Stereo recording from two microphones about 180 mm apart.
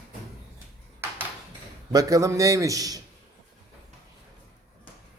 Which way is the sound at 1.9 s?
20° right (ahead or behind).